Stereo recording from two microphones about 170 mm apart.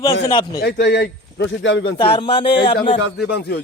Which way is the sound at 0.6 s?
75° left (ahead or behind).